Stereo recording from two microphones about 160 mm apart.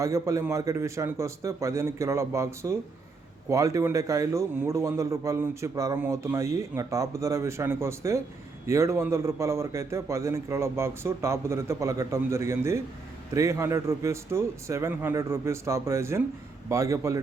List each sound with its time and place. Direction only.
0.0 s a man's voice: 20° right (ahead or behind)